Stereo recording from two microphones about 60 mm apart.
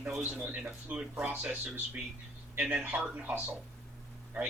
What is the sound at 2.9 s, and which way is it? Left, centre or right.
Speech, right.